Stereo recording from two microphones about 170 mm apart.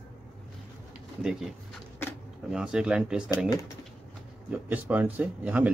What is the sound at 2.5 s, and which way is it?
Speech, 5° right (ahead or behind).